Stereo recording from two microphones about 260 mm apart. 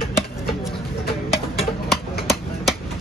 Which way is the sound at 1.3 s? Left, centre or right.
Centre.